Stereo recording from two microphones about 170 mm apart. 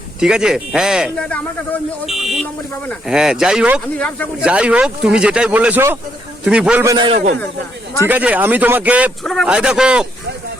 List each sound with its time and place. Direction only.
0.2 s speech: 5° right (ahead or behind)
1.1 s speech: 5° left (ahead or behind)
3.9 s speech: 10° left (ahead or behind)
4.4 s speech: 5° right (ahead or behind)
6.8 s a man's voice: 25° right (ahead or behind)
8.0 s speech: 10° right (ahead or behind)